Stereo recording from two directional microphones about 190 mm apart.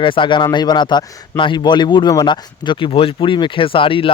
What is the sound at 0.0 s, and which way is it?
Speech, 25° left (ahead or behind).